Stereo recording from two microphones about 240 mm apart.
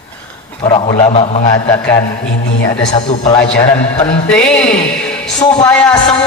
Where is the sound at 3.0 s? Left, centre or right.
Left.